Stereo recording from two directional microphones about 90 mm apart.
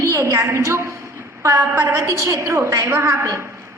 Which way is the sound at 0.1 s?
30° right (ahead or behind).